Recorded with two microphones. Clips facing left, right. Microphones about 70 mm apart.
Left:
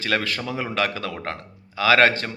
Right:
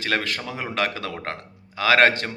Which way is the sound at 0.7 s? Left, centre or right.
Right.